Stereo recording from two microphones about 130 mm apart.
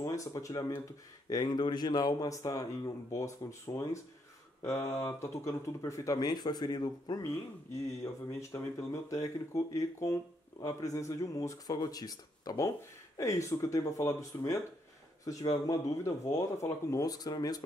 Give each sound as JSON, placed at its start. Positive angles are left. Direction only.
{"t": 0.0, "sound": "speech", "side_deg": 25}